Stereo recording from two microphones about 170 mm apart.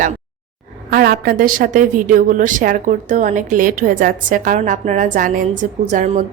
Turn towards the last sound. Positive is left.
turn(degrees=-45)  # may be behind; listen again after turning